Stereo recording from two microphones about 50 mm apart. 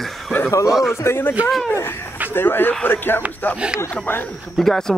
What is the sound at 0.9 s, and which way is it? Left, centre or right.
Speech, left.